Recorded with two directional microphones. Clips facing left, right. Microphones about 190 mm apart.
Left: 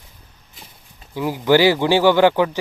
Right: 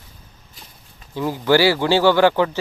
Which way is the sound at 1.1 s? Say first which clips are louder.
Left 1 dB; 15° left (ahead or behind).